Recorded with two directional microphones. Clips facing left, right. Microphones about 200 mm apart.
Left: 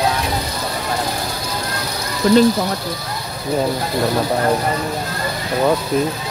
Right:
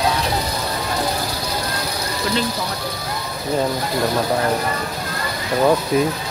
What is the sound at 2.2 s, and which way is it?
Speech, 40° left (ahead or behind).